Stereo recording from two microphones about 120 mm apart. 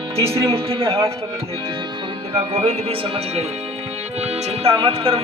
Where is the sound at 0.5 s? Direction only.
50° right (ahead or behind).